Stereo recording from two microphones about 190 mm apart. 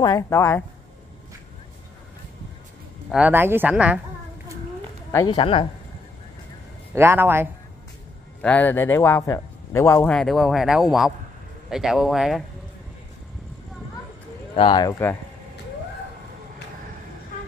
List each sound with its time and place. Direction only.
0.0 s a man's voice: 15° left (ahead or behind)
3.1 s speech: 10° right (ahead or behind)
5.1 s speech: 20° left (ahead or behind)
7.0 s speech: 10° right (ahead or behind)
8.4 s a man's voice: 5° left (ahead or behind)
10.1 s speech: centre (ahead or behind)
14.5 s speech: 25° left (ahead or behind)